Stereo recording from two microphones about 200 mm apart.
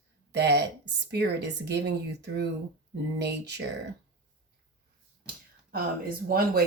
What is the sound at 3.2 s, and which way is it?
Speech, 55° right (ahead or behind).